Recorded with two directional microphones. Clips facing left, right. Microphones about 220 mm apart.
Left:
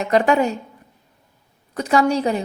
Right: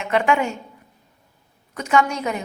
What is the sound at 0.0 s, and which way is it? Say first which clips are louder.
Speech: left 3 dB; 40° left (ahead or behind).